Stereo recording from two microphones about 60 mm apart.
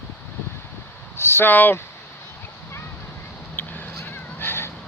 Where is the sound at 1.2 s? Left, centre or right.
Left.